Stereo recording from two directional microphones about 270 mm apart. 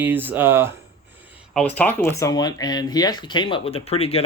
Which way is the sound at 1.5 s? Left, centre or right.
Centre.